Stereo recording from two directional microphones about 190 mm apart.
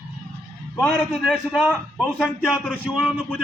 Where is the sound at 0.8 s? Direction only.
Centre (ahead or behind).